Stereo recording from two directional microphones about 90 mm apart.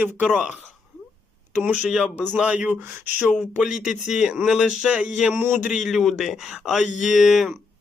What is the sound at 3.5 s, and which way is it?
Speech, 10° right (ahead or behind).